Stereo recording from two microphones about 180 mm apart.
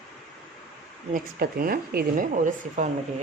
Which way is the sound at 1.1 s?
55° right (ahead or behind).